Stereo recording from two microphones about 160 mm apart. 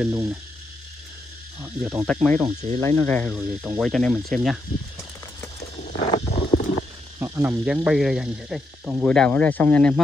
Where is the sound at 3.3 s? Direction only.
10° right (ahead or behind).